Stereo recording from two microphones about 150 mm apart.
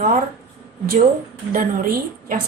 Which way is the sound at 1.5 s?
65° right (ahead or behind).